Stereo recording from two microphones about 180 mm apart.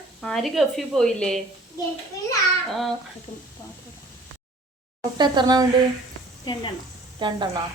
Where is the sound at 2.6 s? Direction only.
Centre (ahead or behind).